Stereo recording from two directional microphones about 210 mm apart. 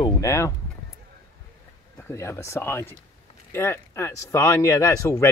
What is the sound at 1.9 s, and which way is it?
Speech, 10° left (ahead or behind).